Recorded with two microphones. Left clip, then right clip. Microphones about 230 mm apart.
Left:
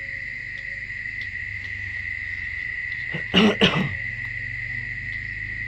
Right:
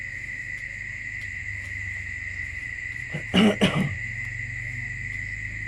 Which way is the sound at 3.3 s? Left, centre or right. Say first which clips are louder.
Left 3 dB; left.